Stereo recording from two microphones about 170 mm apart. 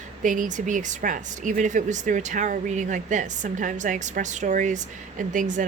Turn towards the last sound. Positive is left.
turn(degrees=-50)  # may be behind; listen again after turning